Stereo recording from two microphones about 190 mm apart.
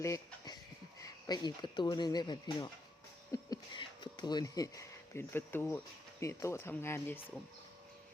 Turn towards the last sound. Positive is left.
turn(degrees=15)  # may be behind; listen again after turning